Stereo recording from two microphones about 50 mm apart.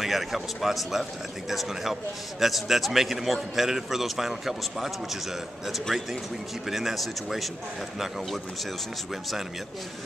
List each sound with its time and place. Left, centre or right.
0.0 s a man's voice: centre